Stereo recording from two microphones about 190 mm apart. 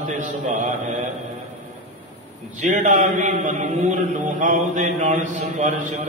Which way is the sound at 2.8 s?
40° right (ahead or behind).